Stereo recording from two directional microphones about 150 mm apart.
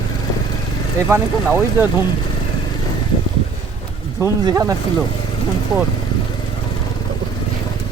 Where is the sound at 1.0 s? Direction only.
10° right (ahead or behind).